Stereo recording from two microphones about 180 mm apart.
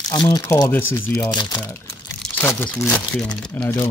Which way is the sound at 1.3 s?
25° left (ahead or behind).